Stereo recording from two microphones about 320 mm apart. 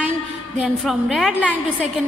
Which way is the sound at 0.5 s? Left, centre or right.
Centre.